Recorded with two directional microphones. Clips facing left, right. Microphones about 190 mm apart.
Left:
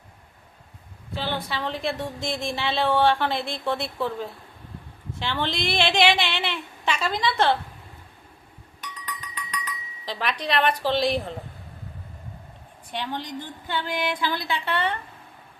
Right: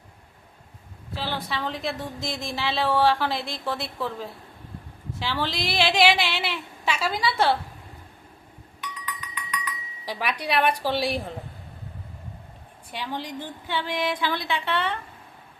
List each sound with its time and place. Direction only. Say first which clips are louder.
1.1 s a woman's voice: left 1 dB; centre (ahead or behind)
9.3 s cowbell: right 1 dB; 35° left (ahead or behind)
10.1 s a woman's voice: even; 10° right (ahead or behind)
12.9 s a woman's voice: left 1 dB; 5° right (ahead or behind)